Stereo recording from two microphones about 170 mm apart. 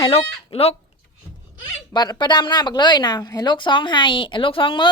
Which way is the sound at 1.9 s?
25° left (ahead or behind).